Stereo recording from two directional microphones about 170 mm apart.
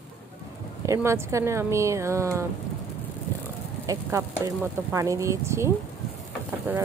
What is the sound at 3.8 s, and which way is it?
Speech, 20° right (ahead or behind).